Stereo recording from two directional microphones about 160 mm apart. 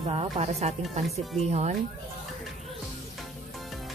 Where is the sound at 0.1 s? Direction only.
40° right (ahead or behind).